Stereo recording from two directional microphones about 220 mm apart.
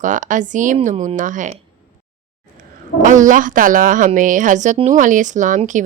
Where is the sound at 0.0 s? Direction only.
35° right (ahead or behind).